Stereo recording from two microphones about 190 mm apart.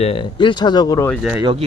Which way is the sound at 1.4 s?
25° right (ahead or behind).